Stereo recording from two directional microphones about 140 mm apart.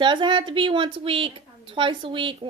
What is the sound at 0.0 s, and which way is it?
A woman's voice, 35° right (ahead or behind).